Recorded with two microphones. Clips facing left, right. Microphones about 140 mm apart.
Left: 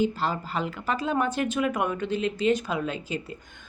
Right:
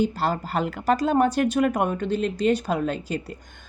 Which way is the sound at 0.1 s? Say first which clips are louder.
Right 4 dB; 40° right (ahead or behind).